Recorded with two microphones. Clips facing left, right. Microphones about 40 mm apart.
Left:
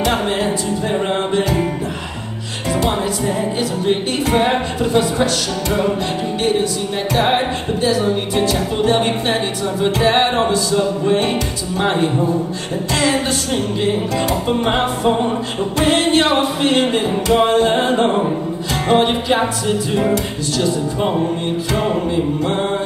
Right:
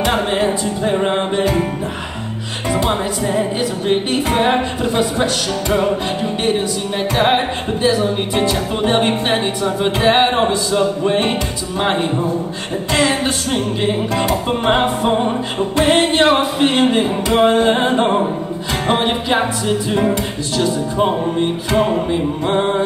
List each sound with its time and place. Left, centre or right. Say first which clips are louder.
0.0 s music: right 1 dB; centre
2.8 s music: left 1 dB; centre
4.3 s a woman's voice: even; centre
7.2 s music: right 1 dB; centre